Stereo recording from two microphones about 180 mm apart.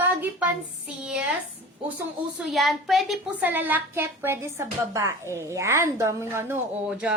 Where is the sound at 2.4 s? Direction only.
Centre (ahead or behind).